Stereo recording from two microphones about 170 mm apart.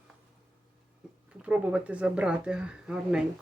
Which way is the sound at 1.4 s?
5° right (ahead or behind).